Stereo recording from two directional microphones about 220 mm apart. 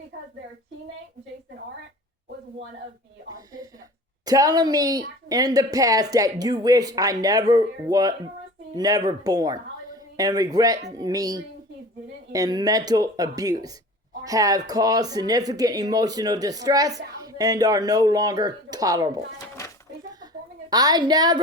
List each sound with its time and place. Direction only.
3.3 s a woman's voice: 15° right (ahead or behind)
20.7 s a woman's voice: 15° right (ahead or behind)